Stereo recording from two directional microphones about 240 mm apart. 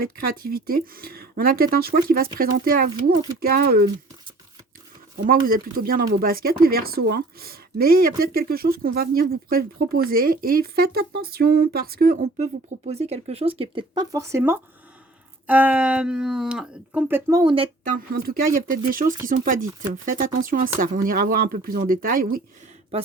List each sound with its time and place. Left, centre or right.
0.0 s speech: right
5.1 s speech: right; by 17.4 s centre
17.4 s speech: right
17.9 s speech: right